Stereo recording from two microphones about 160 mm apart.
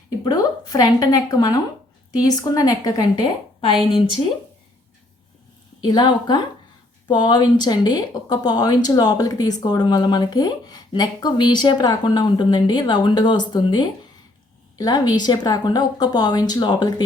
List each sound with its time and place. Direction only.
0.3 s speech: 25° left (ahead or behind)
5.8 s speech: 30° left (ahead or behind)